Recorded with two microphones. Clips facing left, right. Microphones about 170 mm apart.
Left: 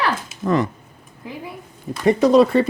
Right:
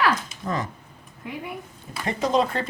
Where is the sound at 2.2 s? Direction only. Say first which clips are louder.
Left 8 dB; 70° left (ahead or behind).